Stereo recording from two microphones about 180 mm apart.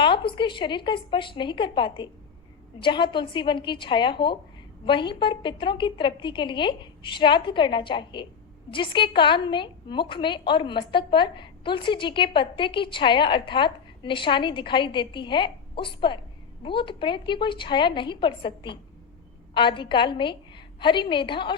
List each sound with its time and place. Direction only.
0.0 s a woman's voice: 25° left (ahead or behind)